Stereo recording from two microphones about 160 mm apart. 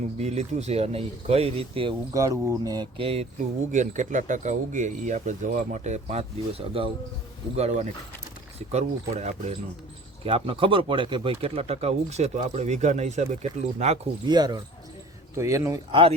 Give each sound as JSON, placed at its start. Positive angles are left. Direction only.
{"t": 0.2, "sound": "speech", "side_deg": -45}
{"t": 2.1, "sound": "speech", "side_deg": -20}
{"t": 3.0, "sound": "speech", "side_deg": -40}
{"t": 3.7, "sound": "speech", "side_deg": -50}
{"t": 14.3, "sound": "speech", "side_deg": -25}
{"t": 15.9, "sound": "speech", "side_deg": -35}